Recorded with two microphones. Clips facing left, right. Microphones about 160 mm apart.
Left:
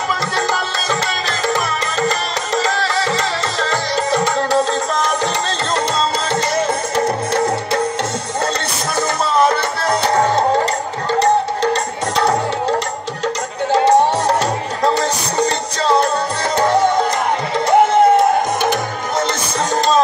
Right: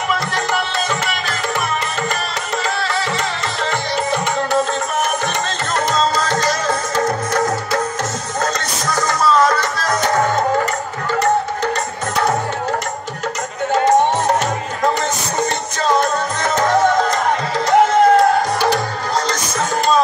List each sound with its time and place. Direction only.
1.5 s music: 35° left (ahead or behind)
13.7 s music: 35° left (ahead or behind)